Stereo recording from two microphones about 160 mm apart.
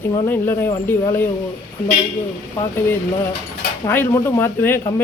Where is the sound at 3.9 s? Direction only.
15° left (ahead or behind).